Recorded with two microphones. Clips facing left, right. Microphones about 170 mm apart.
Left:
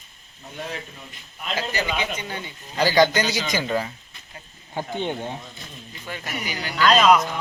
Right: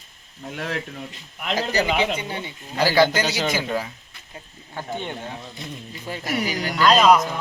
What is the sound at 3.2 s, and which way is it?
Speech, 65° right (ahead or behind).